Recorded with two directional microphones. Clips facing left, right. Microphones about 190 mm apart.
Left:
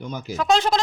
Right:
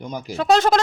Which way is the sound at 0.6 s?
50° right (ahead or behind).